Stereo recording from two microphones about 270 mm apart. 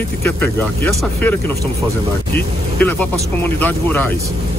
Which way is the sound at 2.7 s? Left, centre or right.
Centre.